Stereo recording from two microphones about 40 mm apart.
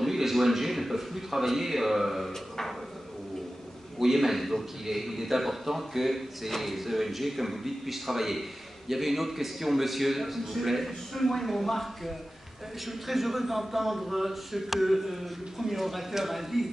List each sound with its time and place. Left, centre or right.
0.0 s a man's voice: centre
4.0 s a man's voice: centre